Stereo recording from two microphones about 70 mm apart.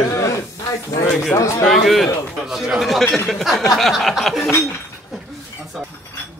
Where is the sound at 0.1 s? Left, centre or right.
Left.